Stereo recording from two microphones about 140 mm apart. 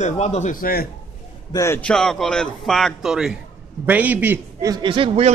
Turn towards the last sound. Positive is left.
turn(degrees=-45)  # may be behind; listen again after turning